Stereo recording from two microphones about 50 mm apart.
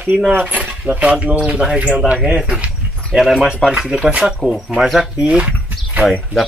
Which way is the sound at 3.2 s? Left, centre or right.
Centre.